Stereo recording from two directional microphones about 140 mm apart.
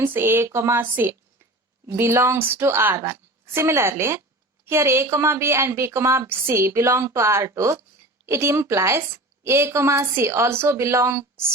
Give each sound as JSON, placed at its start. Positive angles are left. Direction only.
{"t": 0.0, "sound": "a woman's voice", "side_deg": -15}